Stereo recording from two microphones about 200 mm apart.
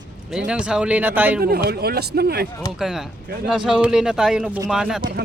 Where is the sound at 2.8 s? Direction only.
Centre (ahead or behind).